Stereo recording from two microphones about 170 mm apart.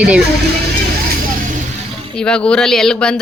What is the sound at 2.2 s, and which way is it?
A woman's voice, 5° left (ahead or behind).